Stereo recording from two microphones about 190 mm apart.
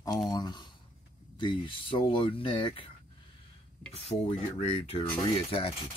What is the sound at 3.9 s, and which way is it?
Speech, 35° left (ahead or behind).